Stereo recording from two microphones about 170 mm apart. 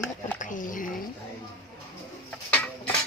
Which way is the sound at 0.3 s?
50° left (ahead or behind).